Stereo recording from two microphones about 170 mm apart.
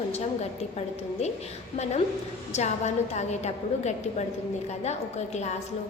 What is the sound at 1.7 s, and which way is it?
A woman's voice, 40° left (ahead or behind).